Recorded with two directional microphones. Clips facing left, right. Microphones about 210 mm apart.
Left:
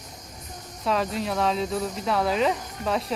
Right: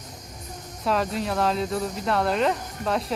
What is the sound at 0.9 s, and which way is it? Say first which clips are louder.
Speech: right 1 dB; centre (ahead or behind).